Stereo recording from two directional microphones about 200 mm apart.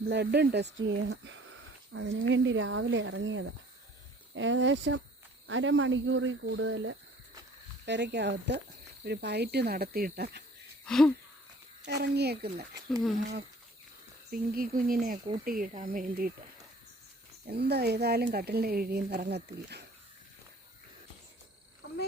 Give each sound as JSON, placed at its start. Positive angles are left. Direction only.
{"t": 0.1, "sound": "speech", "side_deg": -55}
{"t": 7.9, "sound": "speech", "side_deg": -60}
{"t": 10.8, "sound": "wheeze", "side_deg": 5}
{"t": 11.9, "sound": "speech", "side_deg": -55}
{"t": 14.3, "sound": "speech", "side_deg": -45}
{"t": 17.4, "sound": "speech", "side_deg": -50}